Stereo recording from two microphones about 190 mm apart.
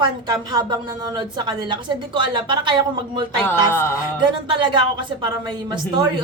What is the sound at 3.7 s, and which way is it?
Music, 10° left (ahead or behind).